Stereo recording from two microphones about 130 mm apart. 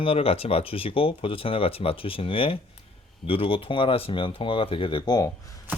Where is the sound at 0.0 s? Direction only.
45° left (ahead or behind); by 5.3 s 30° left (ahead or behind).